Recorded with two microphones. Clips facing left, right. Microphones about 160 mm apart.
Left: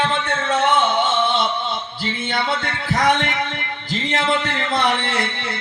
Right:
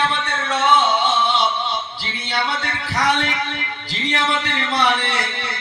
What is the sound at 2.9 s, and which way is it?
A man's voice, 50° left (ahead or behind).